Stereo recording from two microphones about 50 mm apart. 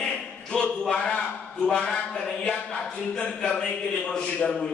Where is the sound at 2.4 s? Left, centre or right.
Centre.